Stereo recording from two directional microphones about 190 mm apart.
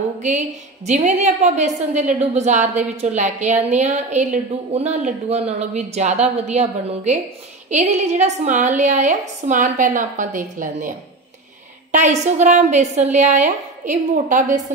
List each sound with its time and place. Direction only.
0.8 s a woman's voice: 40° right (ahead or behind)